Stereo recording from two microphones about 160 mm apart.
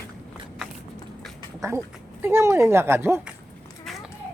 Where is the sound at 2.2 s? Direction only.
15° right (ahead or behind).